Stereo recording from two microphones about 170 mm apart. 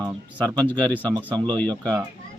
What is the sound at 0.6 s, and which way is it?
Speech, 10° left (ahead or behind).